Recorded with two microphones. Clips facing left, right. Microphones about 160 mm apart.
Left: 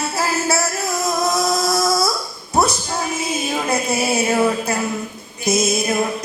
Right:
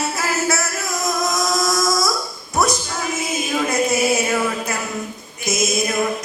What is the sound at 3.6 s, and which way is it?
Music, 30° left (ahead or behind).